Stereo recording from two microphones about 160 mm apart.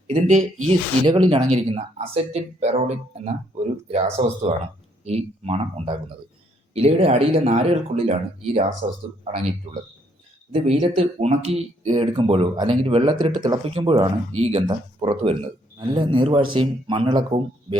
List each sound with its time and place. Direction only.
0.1 s speech: 50° right (ahead or behind)
1.0 s speech: 30° right (ahead or behind)
1.5 s speech: 40° right (ahead or behind)
10.5 s speech: 40° right (ahead or behind)